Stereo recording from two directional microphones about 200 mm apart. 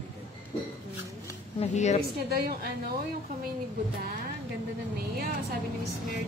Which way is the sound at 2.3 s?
45° right (ahead or behind).